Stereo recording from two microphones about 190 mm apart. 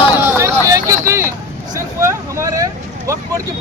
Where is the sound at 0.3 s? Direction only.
15° right (ahead or behind).